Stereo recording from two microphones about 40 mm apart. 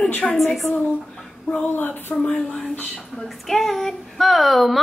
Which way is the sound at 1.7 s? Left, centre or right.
Left.